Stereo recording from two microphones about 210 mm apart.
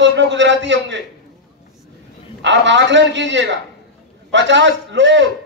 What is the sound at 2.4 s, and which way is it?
A man's voice, 60° right (ahead or behind).